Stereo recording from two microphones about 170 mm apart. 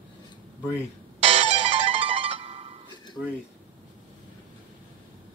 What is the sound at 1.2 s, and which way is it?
Music, 35° right (ahead or behind).